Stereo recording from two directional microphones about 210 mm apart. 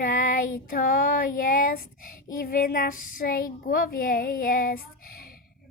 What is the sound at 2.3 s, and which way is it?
Speech, 40° left (ahead or behind).